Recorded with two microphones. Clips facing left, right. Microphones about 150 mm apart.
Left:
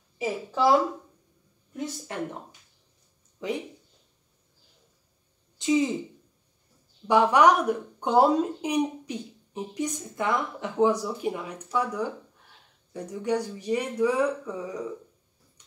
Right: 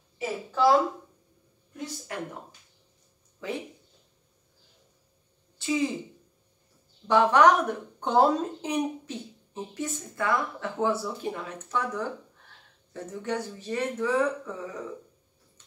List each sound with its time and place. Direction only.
0.2 s a woman's voice: 15° left (ahead or behind)
3.4 s speech: 20° left (ahead or behind)
5.6 s speech: 20° left (ahead or behind)
7.1 s a woman's voice: 10° left (ahead or behind)